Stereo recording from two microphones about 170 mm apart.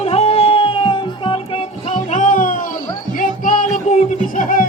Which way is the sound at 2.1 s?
50° left (ahead or behind).